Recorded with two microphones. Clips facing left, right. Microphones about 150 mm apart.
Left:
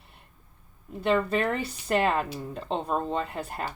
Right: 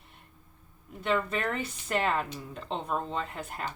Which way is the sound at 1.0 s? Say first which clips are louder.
Left 5 dB; 35° left (ahead or behind).